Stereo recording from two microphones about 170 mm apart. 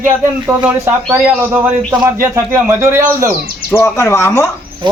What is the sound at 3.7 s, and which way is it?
Speech, 15° left (ahead or behind).